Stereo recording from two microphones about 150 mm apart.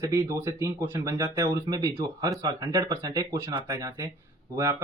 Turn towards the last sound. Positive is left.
turn(degrees=-20)  # may be behind; listen again after turning